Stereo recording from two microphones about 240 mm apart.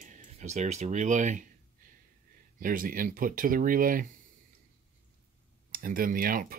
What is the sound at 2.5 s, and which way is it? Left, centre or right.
Speech, right.